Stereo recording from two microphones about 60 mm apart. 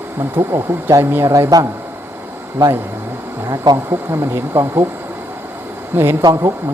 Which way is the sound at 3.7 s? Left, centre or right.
Right.